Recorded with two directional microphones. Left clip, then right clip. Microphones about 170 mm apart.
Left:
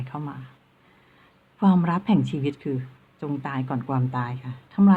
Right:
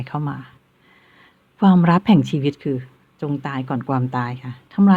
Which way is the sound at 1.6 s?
35° right (ahead or behind).